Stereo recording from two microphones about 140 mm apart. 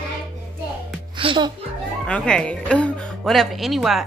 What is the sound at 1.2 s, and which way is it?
Speech, 35° right (ahead or behind).